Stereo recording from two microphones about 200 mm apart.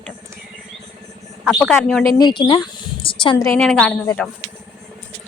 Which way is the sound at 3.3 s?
15° left (ahead or behind).